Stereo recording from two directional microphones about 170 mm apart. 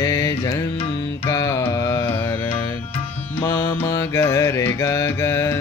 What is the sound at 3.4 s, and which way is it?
Mantra, 15° left (ahead or behind).